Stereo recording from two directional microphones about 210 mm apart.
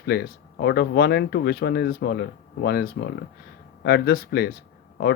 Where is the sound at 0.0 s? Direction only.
50° left (ahead or behind).